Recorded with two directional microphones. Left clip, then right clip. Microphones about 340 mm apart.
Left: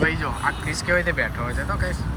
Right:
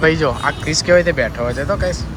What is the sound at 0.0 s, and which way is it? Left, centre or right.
Speech, centre.